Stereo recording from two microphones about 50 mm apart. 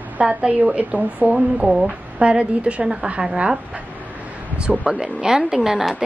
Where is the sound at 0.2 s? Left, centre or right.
Right.